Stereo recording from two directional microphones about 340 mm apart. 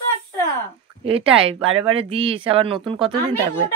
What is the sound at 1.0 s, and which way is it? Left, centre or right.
Speech, centre.